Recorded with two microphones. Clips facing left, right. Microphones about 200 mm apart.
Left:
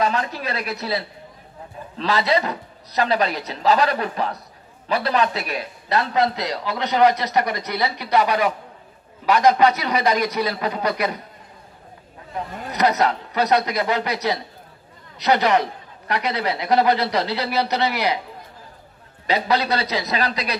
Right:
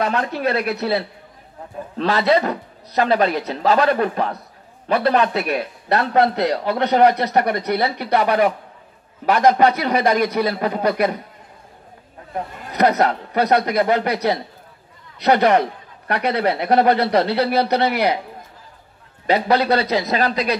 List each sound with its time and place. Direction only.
0.0 s a man's voice: 60° right (ahead or behind)
12.7 s a man's voice: 55° right (ahead or behind)
19.2 s speech: 50° right (ahead or behind)